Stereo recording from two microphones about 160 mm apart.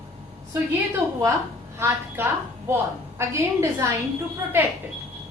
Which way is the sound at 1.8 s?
15° right (ahead or behind).